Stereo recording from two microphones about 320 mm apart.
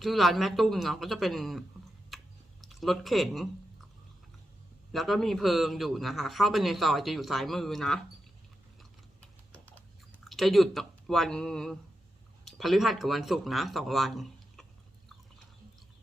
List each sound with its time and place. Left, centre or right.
0.0 s a man's voice: centre
2.0 s typing: centre
4.9 s a man's voice: centre
9.7 s typing: centre
12.5 s speech: centre